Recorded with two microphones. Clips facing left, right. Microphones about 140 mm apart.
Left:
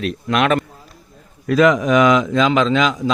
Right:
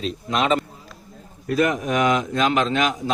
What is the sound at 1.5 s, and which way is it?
Speech, 90° left.